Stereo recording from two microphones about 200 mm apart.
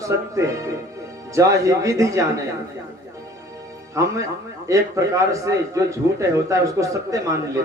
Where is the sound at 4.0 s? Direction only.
15° right (ahead or behind).